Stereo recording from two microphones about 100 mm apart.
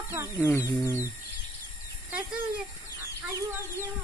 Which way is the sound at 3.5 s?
25° right (ahead or behind).